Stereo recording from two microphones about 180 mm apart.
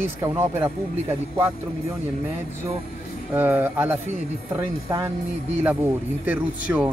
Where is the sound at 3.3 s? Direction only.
10° right (ahead or behind).